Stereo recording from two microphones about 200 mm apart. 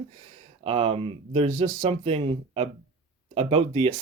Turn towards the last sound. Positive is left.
turn(degrees=-30)  # may be behind; listen again after turning